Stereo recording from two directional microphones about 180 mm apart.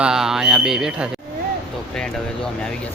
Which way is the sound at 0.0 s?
5° right (ahead or behind).